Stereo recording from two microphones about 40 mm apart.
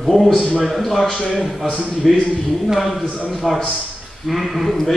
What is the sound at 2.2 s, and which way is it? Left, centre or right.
Speech, centre.